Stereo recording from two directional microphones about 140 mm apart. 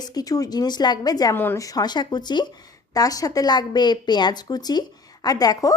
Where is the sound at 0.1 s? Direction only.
25° left (ahead or behind).